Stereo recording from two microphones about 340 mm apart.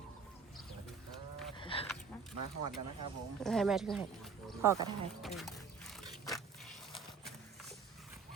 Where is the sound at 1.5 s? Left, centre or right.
Centre.